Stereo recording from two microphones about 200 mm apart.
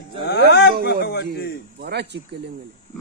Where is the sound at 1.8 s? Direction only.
55° right (ahead or behind).